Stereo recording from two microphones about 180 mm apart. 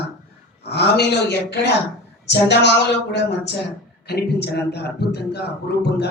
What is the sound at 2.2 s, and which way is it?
Speech, 70° left (ahead or behind).